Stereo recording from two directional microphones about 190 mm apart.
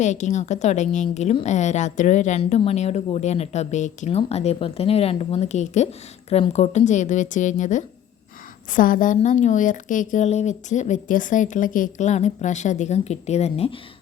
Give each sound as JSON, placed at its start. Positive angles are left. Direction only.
{"t": 0.0, "sound": "a woman's voice", "side_deg": 40}